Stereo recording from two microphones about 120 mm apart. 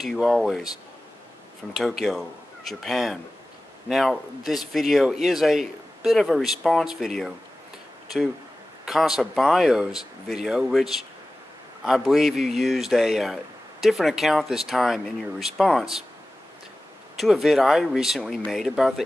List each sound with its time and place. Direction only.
0.0 s a man's voice: centre (ahead or behind)
1.8 s a man's voice: 5° right (ahead or behind)
8.8 s a man's voice: 5° right (ahead or behind)
17.2 s a man's voice: centre (ahead or behind)